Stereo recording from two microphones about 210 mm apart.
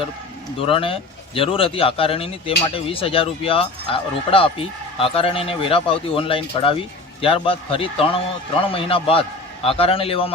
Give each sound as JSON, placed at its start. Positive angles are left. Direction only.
{"t": 0.6, "sound": "speech", "side_deg": 25}